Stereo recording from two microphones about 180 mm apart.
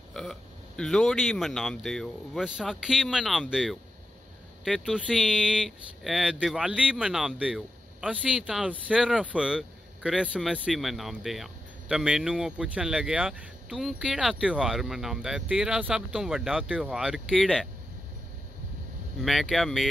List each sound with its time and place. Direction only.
0.1 s speech: centre (ahead or behind)
19.2 s speech: centre (ahead or behind)